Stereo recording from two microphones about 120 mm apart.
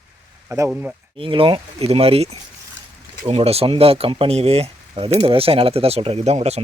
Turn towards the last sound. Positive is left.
turn(degrees=-65)  # may be behind; listen again after turning